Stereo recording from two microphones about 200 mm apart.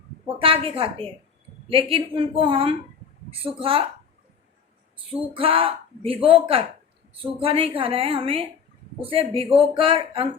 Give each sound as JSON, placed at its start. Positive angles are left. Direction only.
{"t": 0.3, "sound": "speech", "side_deg": -25}
{"t": 5.3, "sound": "speech", "side_deg": -25}